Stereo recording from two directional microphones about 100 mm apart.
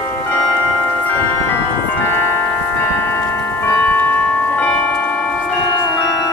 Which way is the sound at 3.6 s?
20° left (ahead or behind).